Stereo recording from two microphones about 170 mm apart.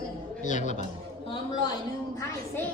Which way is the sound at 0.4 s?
45° left (ahead or behind).